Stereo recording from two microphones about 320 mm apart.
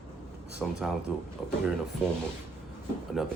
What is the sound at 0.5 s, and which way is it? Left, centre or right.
Speech, centre.